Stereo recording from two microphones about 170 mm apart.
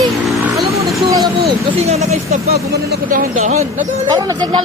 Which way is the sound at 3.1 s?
50° right (ahead or behind).